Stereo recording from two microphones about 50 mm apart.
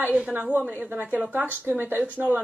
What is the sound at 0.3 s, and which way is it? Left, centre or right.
Speech, right.